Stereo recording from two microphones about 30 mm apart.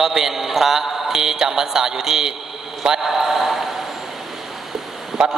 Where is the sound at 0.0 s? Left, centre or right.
Centre.